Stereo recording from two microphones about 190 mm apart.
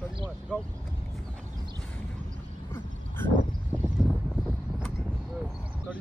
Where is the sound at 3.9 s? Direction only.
Centre (ahead or behind).